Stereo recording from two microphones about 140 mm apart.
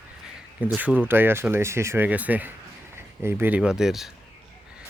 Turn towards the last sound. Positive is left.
turn(degrees=-5)  # may be behind; listen again after turning